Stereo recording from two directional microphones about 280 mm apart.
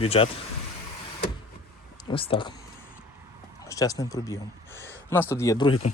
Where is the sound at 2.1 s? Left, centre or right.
Centre.